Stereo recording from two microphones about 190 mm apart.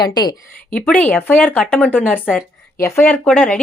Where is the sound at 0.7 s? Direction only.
5° left (ahead or behind).